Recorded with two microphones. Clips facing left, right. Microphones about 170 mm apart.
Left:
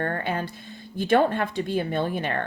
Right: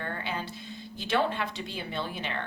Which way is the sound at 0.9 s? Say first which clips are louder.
Left 8 dB; 50° left (ahead or behind).